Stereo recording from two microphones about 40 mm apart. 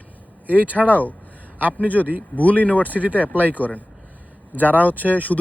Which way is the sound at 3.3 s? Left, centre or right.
Left.